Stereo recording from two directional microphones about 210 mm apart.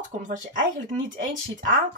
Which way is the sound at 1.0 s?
40° right (ahead or behind).